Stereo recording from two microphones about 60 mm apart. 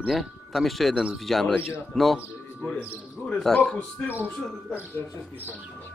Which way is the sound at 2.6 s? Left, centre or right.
Left.